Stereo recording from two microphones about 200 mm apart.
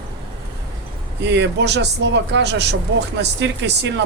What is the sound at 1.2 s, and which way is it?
Speech, 60° right (ahead or behind).